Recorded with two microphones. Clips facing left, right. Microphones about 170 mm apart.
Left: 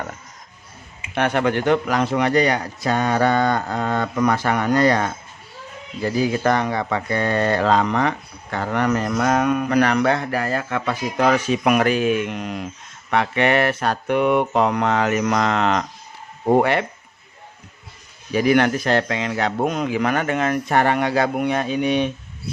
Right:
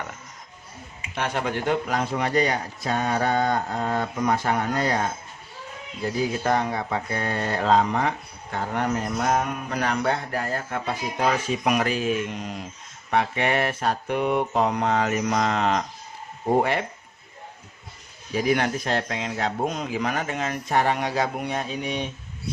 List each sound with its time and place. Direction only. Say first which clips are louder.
1.1 s speech: left 7 dB; 65° left (ahead or behind)
18.3 s speech: left 6 dB; 75° left (ahead or behind)